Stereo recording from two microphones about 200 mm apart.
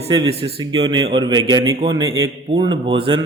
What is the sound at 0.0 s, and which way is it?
A man's voice, 25° right (ahead or behind).